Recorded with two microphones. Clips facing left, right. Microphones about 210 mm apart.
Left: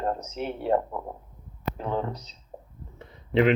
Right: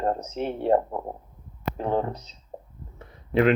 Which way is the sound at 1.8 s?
40° right (ahead or behind).